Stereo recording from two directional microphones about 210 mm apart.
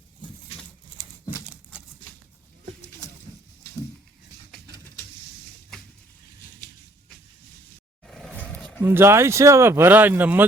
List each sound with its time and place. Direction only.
1.0 s crumpling: 20° right (ahead or behind)
8.0 s a sound: centre (ahead or behind)
8.8 s speech: 10° right (ahead or behind)